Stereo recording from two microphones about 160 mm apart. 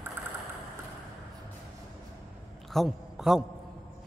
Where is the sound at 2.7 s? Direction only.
Centre (ahead or behind).